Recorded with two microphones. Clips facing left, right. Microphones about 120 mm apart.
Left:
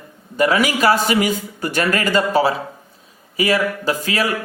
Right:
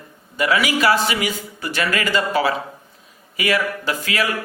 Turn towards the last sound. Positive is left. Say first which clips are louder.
# left 3 dB
turn(degrees=40)  # may be behind; listen again after turning